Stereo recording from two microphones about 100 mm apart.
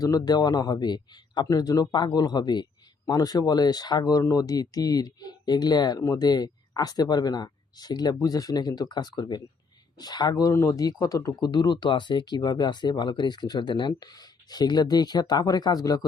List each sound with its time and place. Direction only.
0.0 s speech: 40° left (ahead or behind)
6.0 s speech: 30° left (ahead or behind)
6.2 s speech: 45° left (ahead or behind)